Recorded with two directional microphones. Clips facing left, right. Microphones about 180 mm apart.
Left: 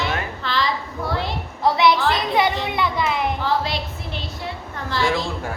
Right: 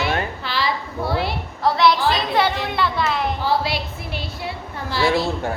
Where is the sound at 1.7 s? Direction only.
20° left (ahead or behind).